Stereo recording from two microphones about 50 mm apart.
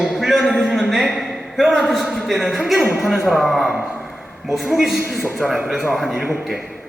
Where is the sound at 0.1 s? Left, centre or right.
Centre.